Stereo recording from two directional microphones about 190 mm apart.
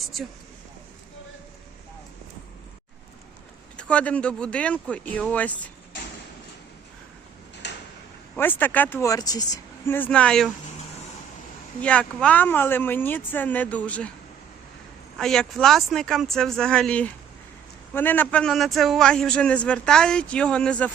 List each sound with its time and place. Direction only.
3.8 s speech: 5° left (ahead or behind)
7.6 s drawer open or close: 65° left (ahead or behind)
8.4 s speech: 10° left (ahead or behind)
11.8 s speech: 5° left (ahead or behind)
15.2 s speech: 5° left (ahead or behind)